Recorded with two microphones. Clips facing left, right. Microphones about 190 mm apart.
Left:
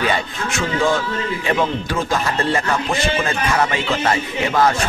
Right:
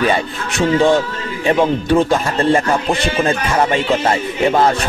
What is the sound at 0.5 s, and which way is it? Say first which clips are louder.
Speech: right 6 dB; 35° right (ahead or behind).